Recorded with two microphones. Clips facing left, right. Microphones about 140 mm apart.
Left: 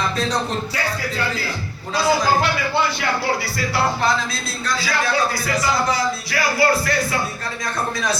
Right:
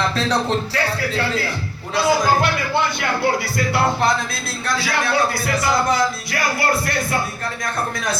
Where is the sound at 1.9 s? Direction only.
55° right (ahead or behind).